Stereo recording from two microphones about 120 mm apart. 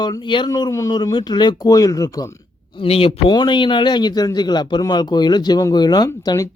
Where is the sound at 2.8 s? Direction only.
55° left (ahead or behind).